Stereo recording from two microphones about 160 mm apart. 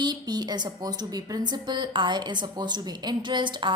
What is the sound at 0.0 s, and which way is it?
A woman's voice, 25° right (ahead or behind).